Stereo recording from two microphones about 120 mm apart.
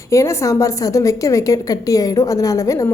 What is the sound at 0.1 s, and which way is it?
A woman's voice, 25° left (ahead or behind).